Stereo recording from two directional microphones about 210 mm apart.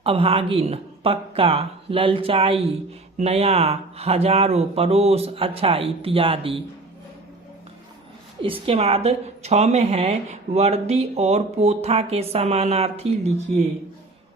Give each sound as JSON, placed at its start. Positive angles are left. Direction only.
{"t": 0.0, "sound": "a woman's voice", "side_deg": -25}
{"t": 8.4, "sound": "a woman's voice", "side_deg": -25}